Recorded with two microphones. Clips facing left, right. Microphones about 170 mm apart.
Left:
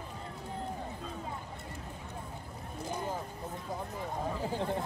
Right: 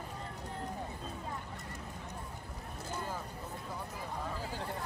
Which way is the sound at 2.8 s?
15° left (ahead or behind).